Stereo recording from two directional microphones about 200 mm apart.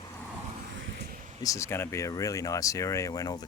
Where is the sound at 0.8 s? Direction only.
50° right (ahead or behind).